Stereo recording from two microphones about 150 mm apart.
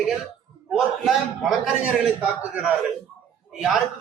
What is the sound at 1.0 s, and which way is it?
A man's voice, centre (ahead or behind).